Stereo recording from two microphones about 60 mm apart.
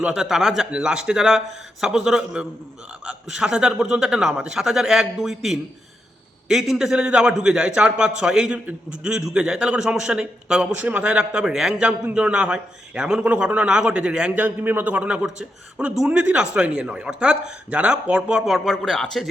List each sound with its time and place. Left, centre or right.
0.1 s a man's voice: centre
10.8 s a man's voice: right
14.9 s a man's voice: centre
18.3 s speech: centre